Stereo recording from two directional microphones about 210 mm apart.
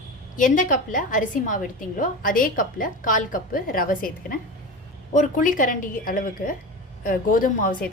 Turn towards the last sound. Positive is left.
turn(degrees=40)  # may be behind; listen again after turning